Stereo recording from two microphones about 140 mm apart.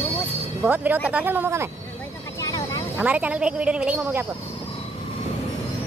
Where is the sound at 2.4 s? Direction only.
25° left (ahead or behind).